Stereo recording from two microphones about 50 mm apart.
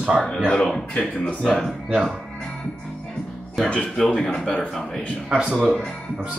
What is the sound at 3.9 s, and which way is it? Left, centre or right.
Speech, centre.